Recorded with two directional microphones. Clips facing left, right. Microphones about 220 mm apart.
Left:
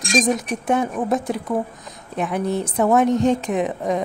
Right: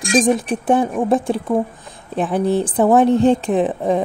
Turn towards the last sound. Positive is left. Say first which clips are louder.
# right 4 dB
turn(degrees=-30)  # may be behind; listen again after turning